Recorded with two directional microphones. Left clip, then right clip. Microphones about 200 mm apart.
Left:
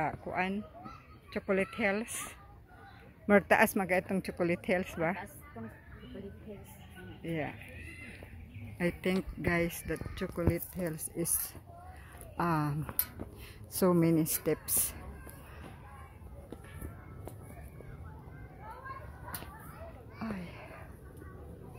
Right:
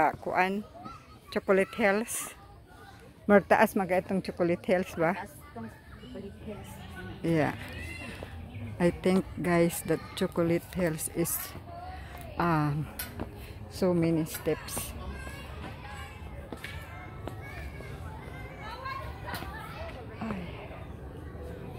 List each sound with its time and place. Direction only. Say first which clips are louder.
0.0 s speech: right 8 dB; 30° right (ahead or behind)
3.3 s speech: right 3 dB; centre (ahead or behind)
4.6 s a woman's voice: right 5 dB; 10° right (ahead or behind)
7.2 s speech: right 9 dB; 10° right (ahead or behind)
8.7 s speech: right 6 dB; centre (ahead or behind)
12.4 s speech: right 4 dB; 15° left (ahead or behind)
13.7 s a woman's voice: even; 30° left (ahead or behind)
20.2 s a sound: right 2 dB; 20° left (ahead or behind)